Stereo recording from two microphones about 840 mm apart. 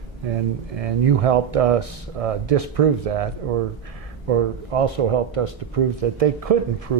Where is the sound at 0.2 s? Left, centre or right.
Right.